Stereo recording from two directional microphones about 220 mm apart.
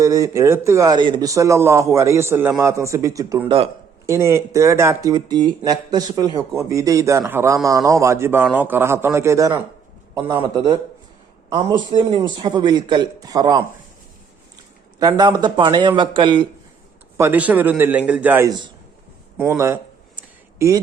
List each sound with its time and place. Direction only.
0.0 s a man's voice: 15° right (ahead or behind)
14.9 s a man's voice: 20° right (ahead or behind)
17.2 s speech: 10° right (ahead or behind)
19.4 s a sound: 10° right (ahead or behind)